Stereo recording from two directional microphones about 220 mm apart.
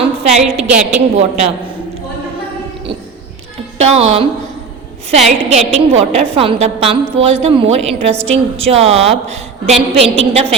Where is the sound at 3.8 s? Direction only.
30° right (ahead or behind).